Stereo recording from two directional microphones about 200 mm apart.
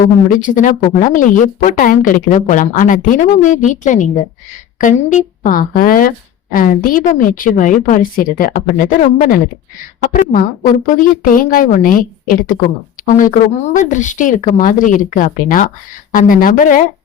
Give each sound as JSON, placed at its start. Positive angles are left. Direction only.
{"t": 0.0, "sound": "a woman's voice", "side_deg": 40}
{"t": 13.7, "sound": "a woman's voice", "side_deg": 40}